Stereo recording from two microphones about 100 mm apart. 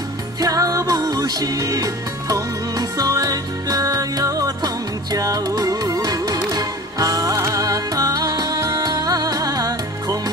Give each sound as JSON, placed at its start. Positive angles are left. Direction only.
{"t": 0.4, "sound": "music", "side_deg": -35}